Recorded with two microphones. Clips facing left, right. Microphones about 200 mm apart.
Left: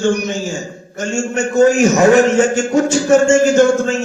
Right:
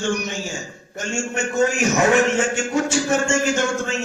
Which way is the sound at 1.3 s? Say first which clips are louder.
Left 9 dB; 40° left (ahead or behind).